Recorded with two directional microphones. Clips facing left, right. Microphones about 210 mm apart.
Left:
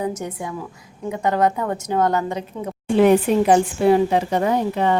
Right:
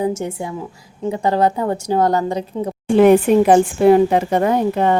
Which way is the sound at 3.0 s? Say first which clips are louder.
Right 4 dB; 55° right (ahead or behind).